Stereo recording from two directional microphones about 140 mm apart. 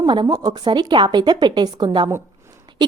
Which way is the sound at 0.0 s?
30° right (ahead or behind).